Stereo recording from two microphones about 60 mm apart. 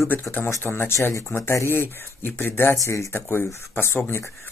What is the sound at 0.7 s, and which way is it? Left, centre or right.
Speech, left.